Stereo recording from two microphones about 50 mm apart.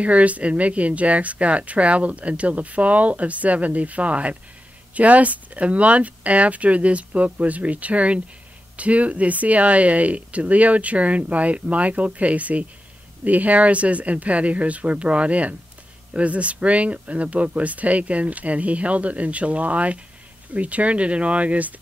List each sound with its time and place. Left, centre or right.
0.0 s speech: right